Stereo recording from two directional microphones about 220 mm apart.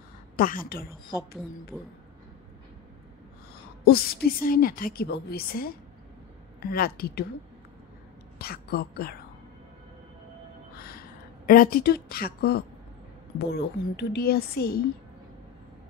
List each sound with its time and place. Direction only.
0.4 s a woman's voice: 40° left (ahead or behind)
1.7 s speech: 5° right (ahead or behind)
3.8 s a woman's voice: 45° left (ahead or behind)
8.4 s a woman's voice: 45° left (ahead or behind)
10.8 s a sound: 45° left (ahead or behind)
13.4 s a woman's voice: 50° left (ahead or behind)